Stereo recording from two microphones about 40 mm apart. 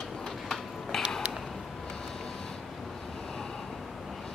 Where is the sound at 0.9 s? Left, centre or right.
Centre.